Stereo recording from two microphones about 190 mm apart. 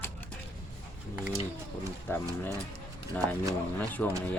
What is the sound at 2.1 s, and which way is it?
Speech, 10° left (ahead or behind).